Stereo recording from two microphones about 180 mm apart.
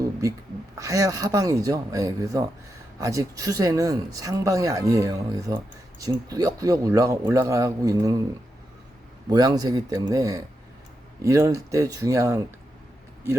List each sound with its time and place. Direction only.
0.0 s a sound: 20° right (ahead or behind)
0.8 s speech: 20° right (ahead or behind)
9.3 s speech: 20° right (ahead or behind)